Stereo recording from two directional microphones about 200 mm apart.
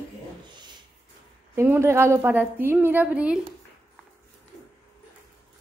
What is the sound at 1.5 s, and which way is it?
A woman's voice, 10° right (ahead or behind).